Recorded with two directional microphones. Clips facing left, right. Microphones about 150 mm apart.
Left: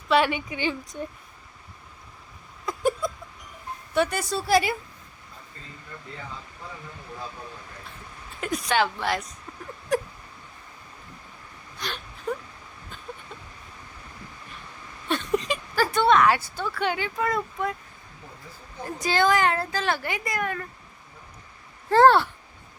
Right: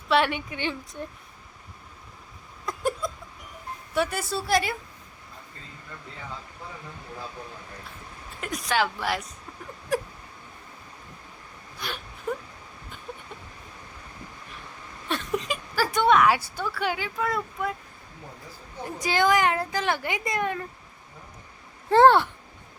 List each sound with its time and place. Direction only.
0.1 s a woman's voice: centre (ahead or behind)
2.6 s a sound: centre (ahead or behind)
3.9 s a woman's voice: 5° right (ahead or behind)
8.4 s a woman's voice: centre (ahead or behind)
15.1 s a woman's voice: centre (ahead or behind)
18.9 s a woman's voice: 15° right (ahead or behind)
21.8 s a woman's voice: 20° right (ahead or behind)